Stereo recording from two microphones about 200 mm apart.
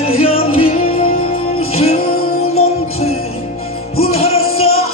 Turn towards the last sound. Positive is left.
turn(degrees=90)